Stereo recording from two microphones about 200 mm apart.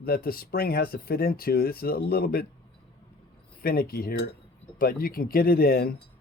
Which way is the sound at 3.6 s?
50° left (ahead or behind).